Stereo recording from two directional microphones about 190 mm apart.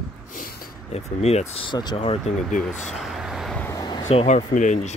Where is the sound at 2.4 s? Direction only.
Centre (ahead or behind).